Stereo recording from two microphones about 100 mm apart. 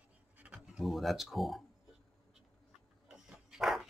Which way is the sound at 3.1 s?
5° right (ahead or behind).